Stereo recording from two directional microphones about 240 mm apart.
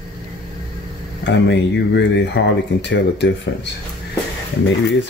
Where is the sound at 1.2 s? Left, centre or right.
Left.